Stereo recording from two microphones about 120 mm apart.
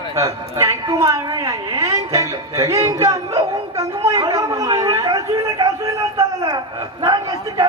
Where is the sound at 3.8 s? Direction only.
30° right (ahead or behind).